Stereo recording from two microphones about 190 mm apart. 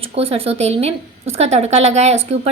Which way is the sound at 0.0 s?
30° right (ahead or behind).